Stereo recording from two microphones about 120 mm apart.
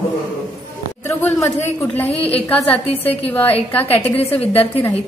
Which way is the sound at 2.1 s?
55° left (ahead or behind).